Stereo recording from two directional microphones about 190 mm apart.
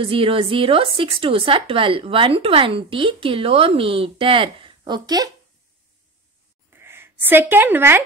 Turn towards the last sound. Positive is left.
turn(degrees=-10)  # may be behind; listen again after turning